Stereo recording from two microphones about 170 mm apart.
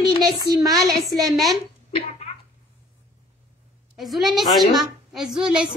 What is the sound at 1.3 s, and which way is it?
Speech, centre (ahead or behind).